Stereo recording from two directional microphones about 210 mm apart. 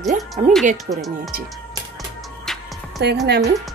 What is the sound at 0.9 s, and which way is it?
Speech, 40° right (ahead or behind).